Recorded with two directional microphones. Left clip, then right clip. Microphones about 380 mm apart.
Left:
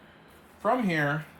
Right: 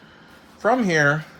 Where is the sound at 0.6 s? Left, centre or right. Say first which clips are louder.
Right 8 dB; centre.